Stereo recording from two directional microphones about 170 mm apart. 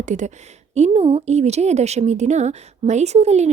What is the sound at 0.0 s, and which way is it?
A woman's voice, 45° right (ahead or behind).